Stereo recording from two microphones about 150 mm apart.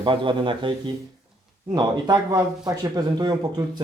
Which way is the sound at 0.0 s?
35° right (ahead or behind).